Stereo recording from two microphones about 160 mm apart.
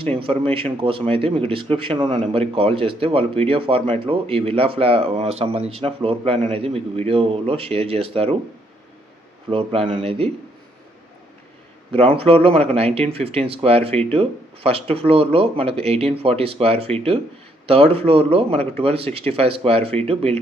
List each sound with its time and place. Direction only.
0.0 s speech: 35° right (ahead or behind)
9.5 s speech: 35° right (ahead or behind)
11.9 s speech: 35° right (ahead or behind)